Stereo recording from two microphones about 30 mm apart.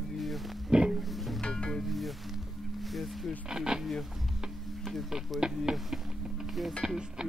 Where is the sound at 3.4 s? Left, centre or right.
Right.